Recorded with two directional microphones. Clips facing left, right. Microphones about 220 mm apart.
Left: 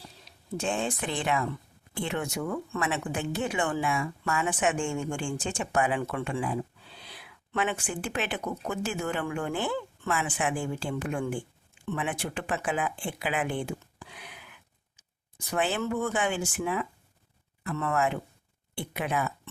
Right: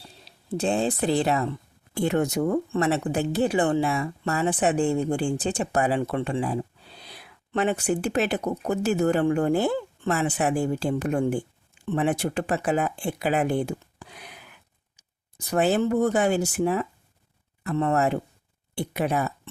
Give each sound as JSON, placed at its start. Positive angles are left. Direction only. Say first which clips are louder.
{"t": 0.3, "sound": "speech", "louder": "right 6 dB", "side_deg": -35}